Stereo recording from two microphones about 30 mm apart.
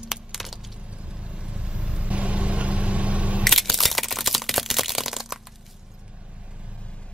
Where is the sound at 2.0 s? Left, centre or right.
Right.